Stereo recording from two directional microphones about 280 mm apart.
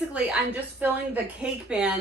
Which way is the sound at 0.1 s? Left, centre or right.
Centre.